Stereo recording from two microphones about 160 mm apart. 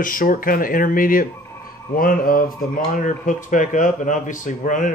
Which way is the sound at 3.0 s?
55° left (ahead or behind).